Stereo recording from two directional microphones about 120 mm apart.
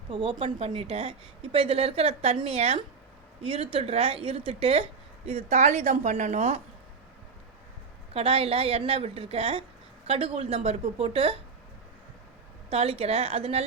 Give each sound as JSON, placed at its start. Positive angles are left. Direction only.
{"t": 0.1, "sound": "a woman's voice", "side_deg": -45}
{"t": 8.1, "sound": "a woman's voice", "side_deg": -55}
{"t": 12.7, "sound": "speech", "side_deg": -55}